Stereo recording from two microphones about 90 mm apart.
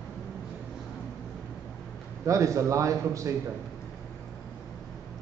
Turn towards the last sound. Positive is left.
turn(degrees=-35)  # may be behind; listen again after turning